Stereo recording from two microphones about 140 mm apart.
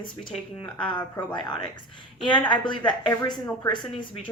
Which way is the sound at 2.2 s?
35° left (ahead or behind).